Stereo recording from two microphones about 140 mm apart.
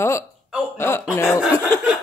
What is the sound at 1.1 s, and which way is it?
Chuckle, 20° left (ahead or behind).